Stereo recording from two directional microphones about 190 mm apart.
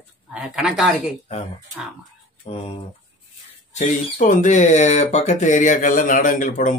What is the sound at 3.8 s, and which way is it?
Speech, 40° left (ahead or behind).